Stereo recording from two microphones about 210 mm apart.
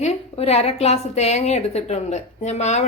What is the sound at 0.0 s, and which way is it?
A woman's voice, 30° left (ahead or behind).